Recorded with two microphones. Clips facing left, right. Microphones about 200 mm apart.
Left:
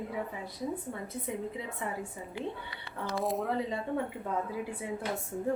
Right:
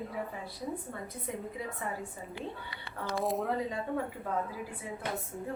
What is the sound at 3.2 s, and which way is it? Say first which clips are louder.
Speech: even; centre (ahead or behind).